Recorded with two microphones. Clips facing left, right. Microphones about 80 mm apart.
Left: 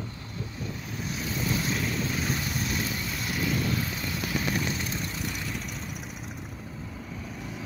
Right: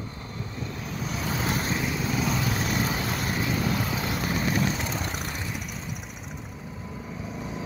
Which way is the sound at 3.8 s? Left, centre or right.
Right.